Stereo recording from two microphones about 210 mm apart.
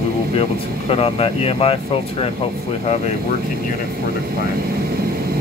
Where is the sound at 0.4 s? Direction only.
25° left (ahead or behind).